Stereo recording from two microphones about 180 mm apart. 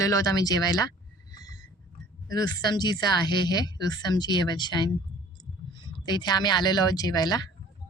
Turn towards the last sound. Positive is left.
turn(degrees=20)  # may be behind; listen again after turning